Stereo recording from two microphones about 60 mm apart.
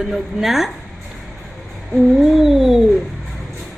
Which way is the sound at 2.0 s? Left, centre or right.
Centre.